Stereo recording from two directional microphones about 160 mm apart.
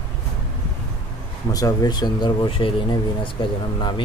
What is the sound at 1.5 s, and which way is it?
Speech, 25° left (ahead or behind).